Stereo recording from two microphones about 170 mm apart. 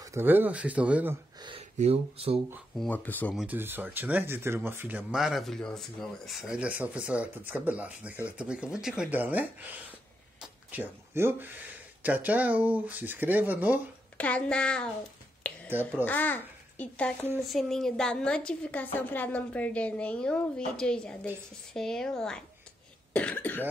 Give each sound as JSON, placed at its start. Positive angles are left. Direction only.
{"t": 0.0, "sound": "speech", "side_deg": -15}
{"t": 1.4, "sound": "speech", "side_deg": -35}
{"t": 2.8, "sound": "speech", "side_deg": 10}
{"t": 3.3, "sound": "speech", "side_deg": -10}
{"t": 14.1, "sound": "speech", "side_deg": 10}
{"t": 16.1, "sound": "a child's voice", "side_deg": 10}
{"t": 23.1, "sound": "cough", "side_deg": 10}